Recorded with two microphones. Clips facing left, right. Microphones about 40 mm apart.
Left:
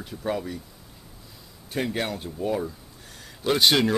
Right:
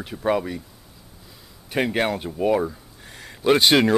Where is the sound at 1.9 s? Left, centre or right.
Right.